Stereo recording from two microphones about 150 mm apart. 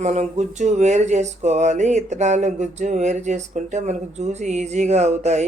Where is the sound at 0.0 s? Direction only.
50° right (ahead or behind).